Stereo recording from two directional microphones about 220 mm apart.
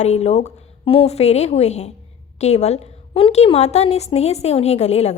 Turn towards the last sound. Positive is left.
turn(degrees=30)  # may be behind; listen again after turning